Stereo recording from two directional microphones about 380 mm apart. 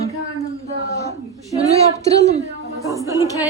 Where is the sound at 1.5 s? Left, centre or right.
Centre.